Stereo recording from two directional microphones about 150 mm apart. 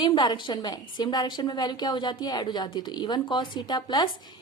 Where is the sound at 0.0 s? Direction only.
30° left (ahead or behind).